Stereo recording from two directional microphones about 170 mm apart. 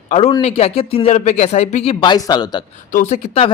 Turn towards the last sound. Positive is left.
turn(degrees=35)  # may be behind; listen again after turning